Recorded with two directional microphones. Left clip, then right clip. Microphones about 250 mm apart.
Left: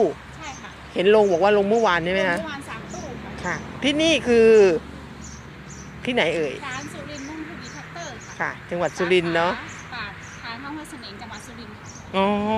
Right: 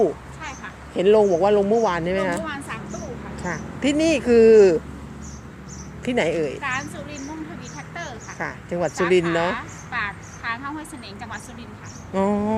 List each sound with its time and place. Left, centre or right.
0.9 s speech: centre
3.4 s speech: centre
6.1 s speech: centre
6.7 s speech: left
8.4 s speech: centre
9.5 s a sound: centre
12.1 s speech: centre